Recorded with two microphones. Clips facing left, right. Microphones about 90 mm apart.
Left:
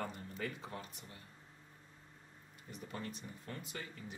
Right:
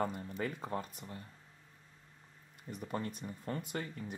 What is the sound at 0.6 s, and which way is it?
Speech, 45° right (ahead or behind).